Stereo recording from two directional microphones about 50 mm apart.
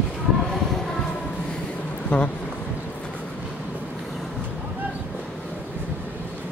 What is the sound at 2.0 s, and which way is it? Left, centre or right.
Speech, centre.